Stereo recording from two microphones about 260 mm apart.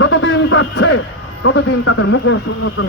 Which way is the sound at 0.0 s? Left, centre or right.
Left.